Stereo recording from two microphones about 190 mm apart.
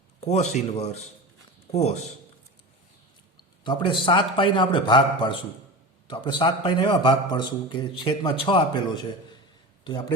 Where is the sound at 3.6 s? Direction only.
25° left (ahead or behind).